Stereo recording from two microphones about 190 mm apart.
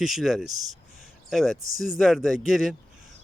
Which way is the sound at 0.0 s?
Centre (ahead or behind).